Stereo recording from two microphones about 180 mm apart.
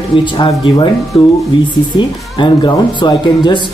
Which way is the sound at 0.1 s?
25° left (ahead or behind).